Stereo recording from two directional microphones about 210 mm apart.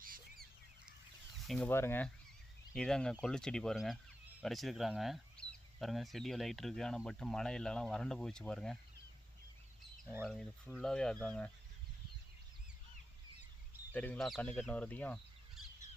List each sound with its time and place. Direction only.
0.0 s bird: 40° right (ahead or behind)
1.5 s speech: 5° left (ahead or behind)
10.2 s speech: centre (ahead or behind)
13.9 s speech: 5° left (ahead or behind)